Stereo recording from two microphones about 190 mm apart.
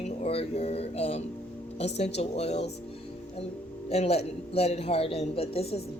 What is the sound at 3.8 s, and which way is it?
A woman's voice, 35° left (ahead or behind).